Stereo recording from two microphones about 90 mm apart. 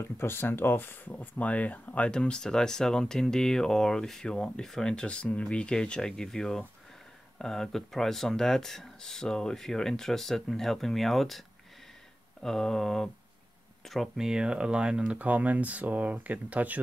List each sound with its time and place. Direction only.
0.0 s speech: 25° left (ahead or behind); by 16.8 s 15° right (ahead or behind)